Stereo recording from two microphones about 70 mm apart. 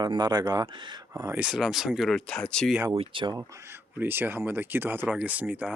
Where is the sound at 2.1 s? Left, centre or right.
Centre.